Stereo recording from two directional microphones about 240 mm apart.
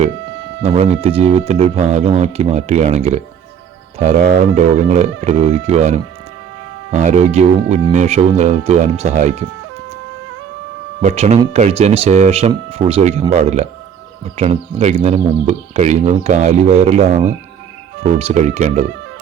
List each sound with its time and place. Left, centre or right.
0.6 s speech: right
11.0 s speech: right